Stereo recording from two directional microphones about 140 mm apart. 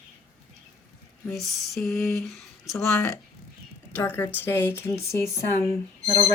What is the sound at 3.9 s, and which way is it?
Speech, 15° left (ahead or behind).